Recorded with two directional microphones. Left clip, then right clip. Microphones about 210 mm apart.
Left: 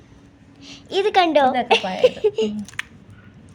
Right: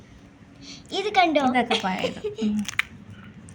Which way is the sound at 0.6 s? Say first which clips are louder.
Left 7 dB; 40° left (ahead or behind).